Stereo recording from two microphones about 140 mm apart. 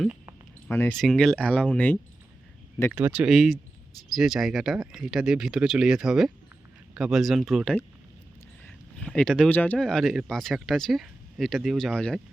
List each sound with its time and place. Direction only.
0.7 s speech: 15° left (ahead or behind)
0.9 s speech: centre (ahead or behind)
3.0 s speech: 5° right (ahead or behind)
9.1 s speech: 5° left (ahead or behind)
9.8 s speech: centre (ahead or behind)